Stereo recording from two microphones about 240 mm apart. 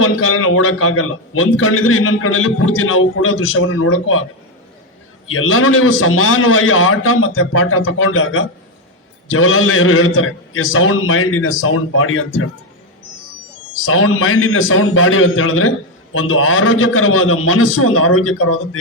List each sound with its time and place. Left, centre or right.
0.0 s a man's voice: left
5.3 s a man's voice: left
13.7 s a man's voice: left